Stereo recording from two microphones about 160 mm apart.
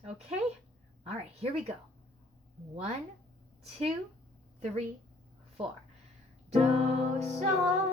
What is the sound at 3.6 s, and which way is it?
Speech, 40° right (ahead or behind).